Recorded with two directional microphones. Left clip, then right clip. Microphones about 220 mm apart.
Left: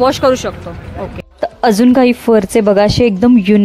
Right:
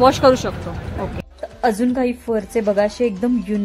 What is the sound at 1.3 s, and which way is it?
A woman's voice, 35° left (ahead or behind).